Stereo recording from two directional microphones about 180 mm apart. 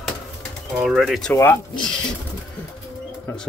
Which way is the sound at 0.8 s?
Centre (ahead or behind).